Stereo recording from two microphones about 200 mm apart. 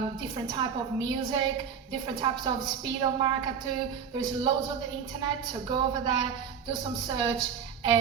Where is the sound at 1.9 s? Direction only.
20° right (ahead or behind).